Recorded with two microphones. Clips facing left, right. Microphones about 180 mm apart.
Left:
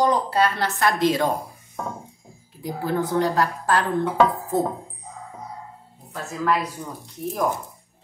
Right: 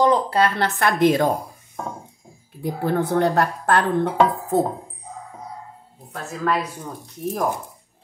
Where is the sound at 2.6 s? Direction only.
60° right (ahead or behind).